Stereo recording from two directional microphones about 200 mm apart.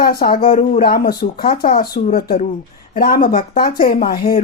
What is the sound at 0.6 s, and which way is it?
Speech, 45° left (ahead or behind).